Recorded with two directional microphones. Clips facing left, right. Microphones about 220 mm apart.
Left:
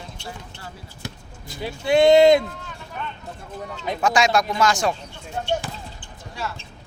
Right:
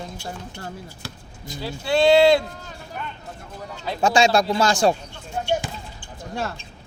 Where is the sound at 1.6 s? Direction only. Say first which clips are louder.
Left 2 dB; 20° left (ahead or behind).